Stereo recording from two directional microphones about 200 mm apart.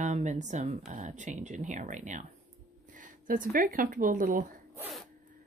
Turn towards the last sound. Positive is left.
turn(degrees=-40)  # may be behind; listen again after turning